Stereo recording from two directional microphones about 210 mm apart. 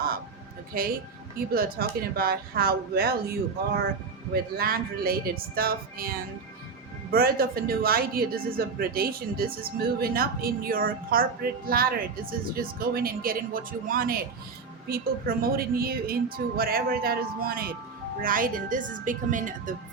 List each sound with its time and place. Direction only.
0.7 s a woman's voice: 45° right (ahead or behind)
4.5 s a woman's voice: 45° right (ahead or behind)